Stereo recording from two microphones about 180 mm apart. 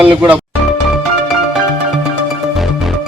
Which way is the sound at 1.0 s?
Centre (ahead or behind).